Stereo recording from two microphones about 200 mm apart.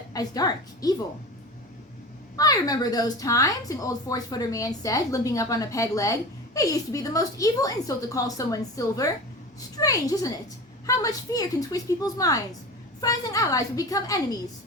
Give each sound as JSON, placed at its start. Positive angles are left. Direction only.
{"t": 0.1, "sound": "a woman's voice", "side_deg": 20}
{"t": 2.3, "sound": "a woman's voice", "side_deg": 20}